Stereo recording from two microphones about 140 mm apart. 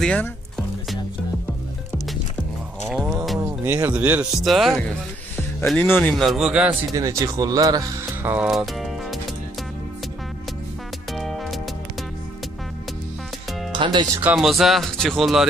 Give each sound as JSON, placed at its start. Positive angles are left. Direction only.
{"t": 0.0, "sound": "speech", "side_deg": 10}
{"t": 2.9, "sound": "music", "side_deg": -5}
{"t": 3.3, "sound": "music", "side_deg": -20}
{"t": 3.9, "sound": "speech", "side_deg": -10}
{"t": 5.8, "sound": "speech", "side_deg": 15}
{"t": 6.1, "sound": "speech", "side_deg": 0}
{"t": 6.9, "sound": "speech", "side_deg": -20}
{"t": 8.3, "sound": "music", "side_deg": -5}
{"t": 11.1, "sound": "music", "side_deg": 0}
{"t": 13.7, "sound": "music", "side_deg": -35}
{"t": 14.2, "sound": "speech", "side_deg": -5}